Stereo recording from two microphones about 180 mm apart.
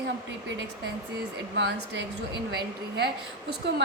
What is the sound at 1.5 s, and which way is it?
Speech, 80° right.